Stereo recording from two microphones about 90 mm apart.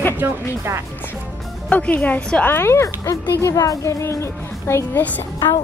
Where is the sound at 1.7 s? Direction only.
15° left (ahead or behind).